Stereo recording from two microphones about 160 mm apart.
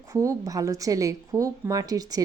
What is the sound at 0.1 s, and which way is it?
A woman's voice, 20° right (ahead or behind).